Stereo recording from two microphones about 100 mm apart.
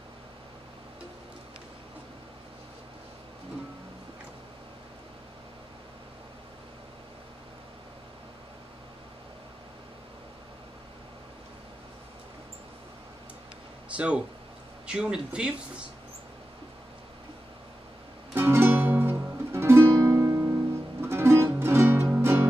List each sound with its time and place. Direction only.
13.8 s speech: 10° right (ahead or behind)
18.3 s music: 25° right (ahead or behind)